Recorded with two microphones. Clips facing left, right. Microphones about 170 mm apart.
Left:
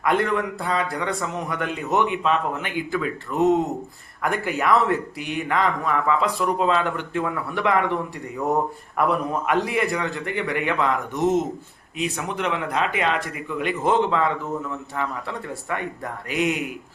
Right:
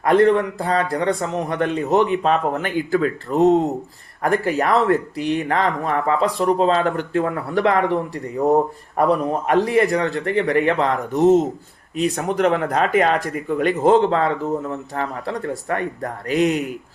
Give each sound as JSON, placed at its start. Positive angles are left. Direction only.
{"t": 0.0, "sound": "speech", "side_deg": -35}